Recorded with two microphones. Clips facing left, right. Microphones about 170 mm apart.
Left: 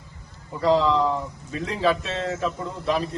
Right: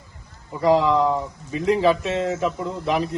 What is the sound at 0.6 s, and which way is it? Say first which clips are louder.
A man's voice: right 2 dB; 15° right (ahead or behind).